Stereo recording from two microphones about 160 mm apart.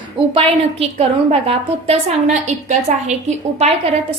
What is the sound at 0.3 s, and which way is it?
A woman's voice, 40° right (ahead or behind).